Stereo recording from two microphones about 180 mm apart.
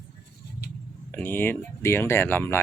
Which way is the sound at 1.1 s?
10° left (ahead or behind).